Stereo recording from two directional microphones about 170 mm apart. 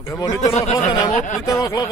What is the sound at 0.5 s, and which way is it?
Speech, 40° left (ahead or behind).